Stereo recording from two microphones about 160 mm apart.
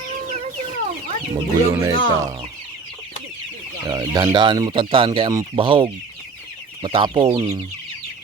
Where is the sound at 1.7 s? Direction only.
20° right (ahead or behind).